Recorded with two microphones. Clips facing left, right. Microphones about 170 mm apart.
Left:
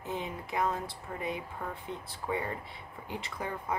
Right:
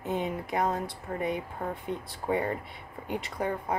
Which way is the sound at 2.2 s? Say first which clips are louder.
Right 5 dB; 50° right (ahead or behind).